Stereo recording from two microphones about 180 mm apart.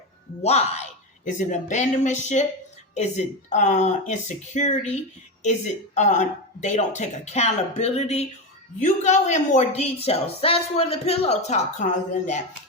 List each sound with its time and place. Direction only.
0.4 s a woman's voice: 35° left (ahead or behind)